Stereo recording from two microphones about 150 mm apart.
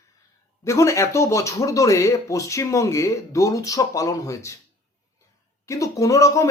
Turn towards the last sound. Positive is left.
turn(degrees=20)  # may be behind; listen again after turning